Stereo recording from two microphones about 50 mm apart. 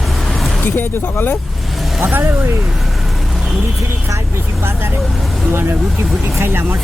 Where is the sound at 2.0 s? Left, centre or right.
Right.